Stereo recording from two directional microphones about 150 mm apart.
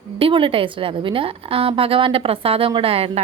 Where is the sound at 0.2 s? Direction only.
35° right (ahead or behind).